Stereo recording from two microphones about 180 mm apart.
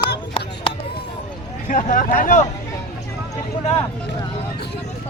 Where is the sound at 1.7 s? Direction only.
45° left (ahead or behind).